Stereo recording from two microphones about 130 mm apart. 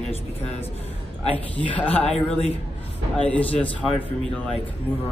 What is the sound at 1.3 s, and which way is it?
Speech, 10° left (ahead or behind).